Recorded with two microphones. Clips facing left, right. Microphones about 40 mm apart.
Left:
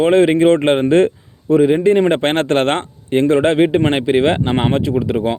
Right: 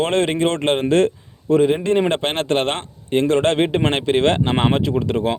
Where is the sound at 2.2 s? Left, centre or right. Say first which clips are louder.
Left 5 dB; left.